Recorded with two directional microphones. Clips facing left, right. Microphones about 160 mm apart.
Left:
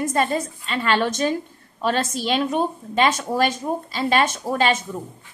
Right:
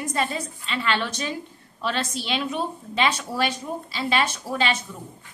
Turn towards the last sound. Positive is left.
turn(degrees=45)  # may be behind; listen again after turning